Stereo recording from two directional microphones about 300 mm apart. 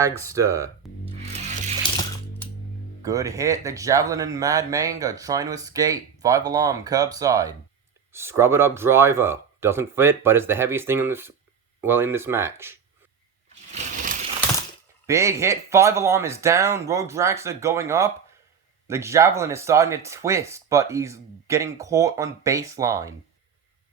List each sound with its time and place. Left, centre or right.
0.2 s speech: centre
1.2 s music: right
3.0 s speech: centre
13.5 s a sound: right
15.0 s speech: centre